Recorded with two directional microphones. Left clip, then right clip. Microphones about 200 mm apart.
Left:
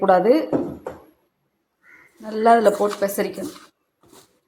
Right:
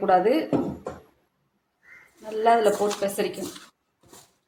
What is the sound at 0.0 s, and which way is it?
Speech, 25° left (ahead or behind).